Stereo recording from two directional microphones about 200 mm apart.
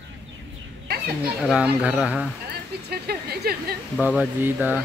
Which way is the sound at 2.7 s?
55° right (ahead or behind).